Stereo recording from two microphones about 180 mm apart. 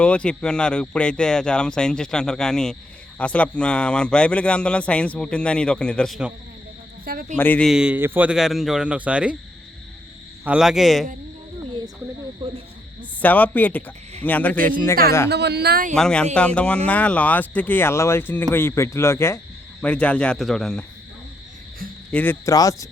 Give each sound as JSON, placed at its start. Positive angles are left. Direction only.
{"t": 0.0, "sound": "a man's voice", "side_deg": 5}
{"t": 7.0, "sound": "a woman's voice", "side_deg": -55}
{"t": 7.3, "sound": "speech", "side_deg": 10}
{"t": 7.7, "sound": "a man's voice", "side_deg": -5}
{"t": 10.4, "sound": "a man's voice", "side_deg": -5}
{"t": 12.4, "sound": "speech", "side_deg": -30}
{"t": 13.0, "sound": "speech", "side_deg": 10}
{"t": 15.3, "sound": "a woman's voice", "side_deg": -65}
{"t": 16.0, "sound": "a man's voice", "side_deg": 5}
{"t": 22.1, "sound": "speech", "side_deg": 10}